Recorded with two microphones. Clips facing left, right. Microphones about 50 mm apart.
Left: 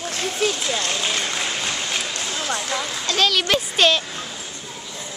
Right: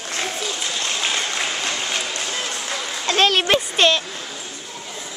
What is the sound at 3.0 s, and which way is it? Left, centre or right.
Speech, right.